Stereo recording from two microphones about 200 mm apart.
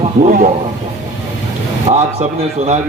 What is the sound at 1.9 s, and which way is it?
Speech, 35° right (ahead or behind).